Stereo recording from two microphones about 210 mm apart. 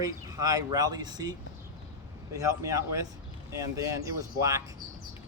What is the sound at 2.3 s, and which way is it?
Speech, 15° right (ahead or behind).